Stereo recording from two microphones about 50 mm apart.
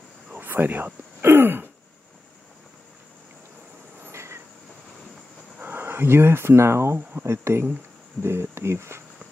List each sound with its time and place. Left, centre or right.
0.3 s a sound: right
1.2 s throat clearing: right
4.1 s train: right
5.6 s speech: right